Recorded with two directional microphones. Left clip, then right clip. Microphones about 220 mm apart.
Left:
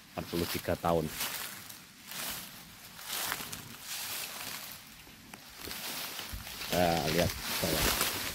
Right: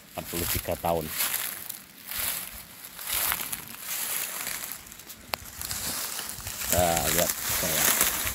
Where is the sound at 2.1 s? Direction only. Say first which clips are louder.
Right 6 dB; 50° right (ahead or behind).